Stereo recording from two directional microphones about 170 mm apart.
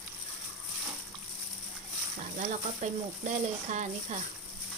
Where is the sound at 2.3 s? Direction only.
45° right (ahead or behind).